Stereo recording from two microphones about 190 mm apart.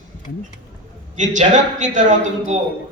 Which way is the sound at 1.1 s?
40° right (ahead or behind).